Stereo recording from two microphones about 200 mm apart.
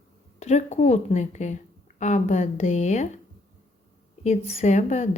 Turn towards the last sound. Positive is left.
turn(degrees=35)  # may be behind; listen again after turning